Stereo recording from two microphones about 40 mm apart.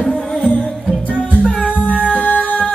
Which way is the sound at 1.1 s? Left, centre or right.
Left.